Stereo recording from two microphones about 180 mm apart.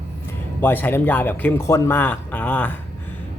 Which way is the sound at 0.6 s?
10° left (ahead or behind).